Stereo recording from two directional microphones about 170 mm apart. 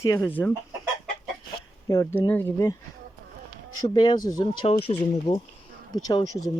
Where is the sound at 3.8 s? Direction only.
25° left (ahead or behind).